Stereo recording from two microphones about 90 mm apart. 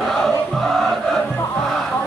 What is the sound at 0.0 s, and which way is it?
Music, 5° left (ahead or behind).